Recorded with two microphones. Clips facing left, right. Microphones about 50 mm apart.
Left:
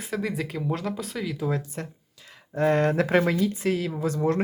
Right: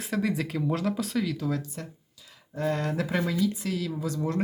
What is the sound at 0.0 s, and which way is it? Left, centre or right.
Speech, centre.